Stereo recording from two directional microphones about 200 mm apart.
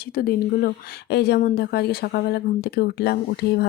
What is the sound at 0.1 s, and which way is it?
Speech, 45° left (ahead or behind).